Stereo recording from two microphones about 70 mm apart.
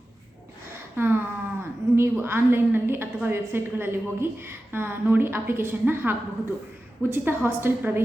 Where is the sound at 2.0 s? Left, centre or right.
Right.